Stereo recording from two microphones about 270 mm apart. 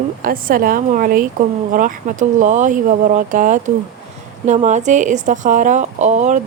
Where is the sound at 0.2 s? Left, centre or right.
Right.